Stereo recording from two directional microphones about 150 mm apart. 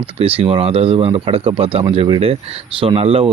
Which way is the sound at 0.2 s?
40° right (ahead or behind).